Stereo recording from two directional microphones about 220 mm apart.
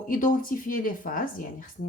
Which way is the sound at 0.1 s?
35° left (ahead or behind).